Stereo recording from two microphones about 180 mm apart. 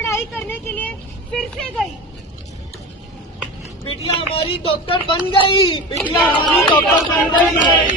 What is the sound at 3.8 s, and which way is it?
Speech, 30° left (ahead or behind).